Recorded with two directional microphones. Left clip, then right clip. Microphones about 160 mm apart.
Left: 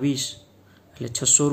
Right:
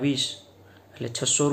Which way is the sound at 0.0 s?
35° left (ahead or behind).